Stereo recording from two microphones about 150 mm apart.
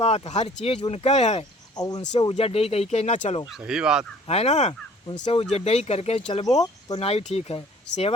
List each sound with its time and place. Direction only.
0.0 s speech: 45° left (ahead or behind)
1.7 s speech: 25° left (ahead or behind)
2.3 s speech: 40° left (ahead or behind)
3.4 s speech: 5° right (ahead or behind)
4.3 s speech: 45° left (ahead or behind)
6.4 s speech: 25° left (ahead or behind)
6.9 s speech: 40° left (ahead or behind)